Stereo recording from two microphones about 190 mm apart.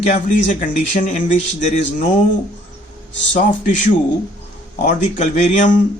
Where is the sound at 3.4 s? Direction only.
40° left (ahead or behind).